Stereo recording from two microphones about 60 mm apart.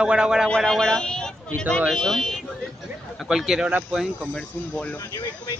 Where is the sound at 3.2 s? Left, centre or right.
Centre.